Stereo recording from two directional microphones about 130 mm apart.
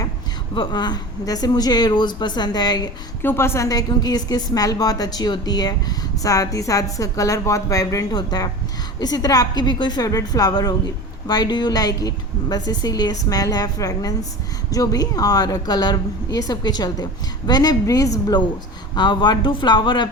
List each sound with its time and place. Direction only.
0.5 s a woman's voice: 35° left (ahead or behind)
3.2 s a woman's voice: 20° left (ahead or behind); by 20.1 s 35° left (ahead or behind)